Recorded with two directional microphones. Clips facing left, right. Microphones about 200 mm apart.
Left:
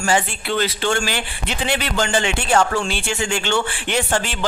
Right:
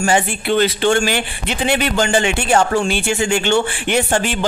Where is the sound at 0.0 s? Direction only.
20° right (ahead or behind).